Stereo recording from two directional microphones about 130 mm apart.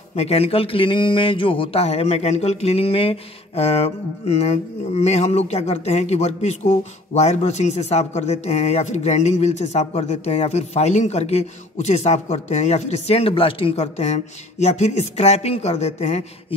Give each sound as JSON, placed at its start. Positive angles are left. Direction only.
{"t": 0.1, "sound": "a man's voice", "side_deg": 50}